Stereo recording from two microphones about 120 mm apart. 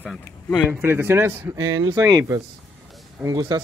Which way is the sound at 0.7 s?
15° right (ahead or behind).